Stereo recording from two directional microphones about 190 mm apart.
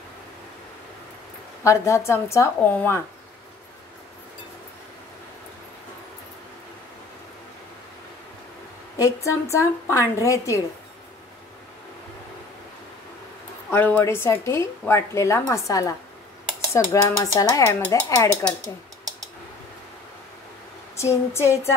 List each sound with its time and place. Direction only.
1.6 s a woman's voice: 15° left (ahead or behind)
8.9 s a woman's voice: 15° left (ahead or behind)
13.7 s a woman's voice: 10° left (ahead or behind)
18.6 s a sound: 20° right (ahead or behind)
20.9 s a woman's voice: 15° left (ahead or behind)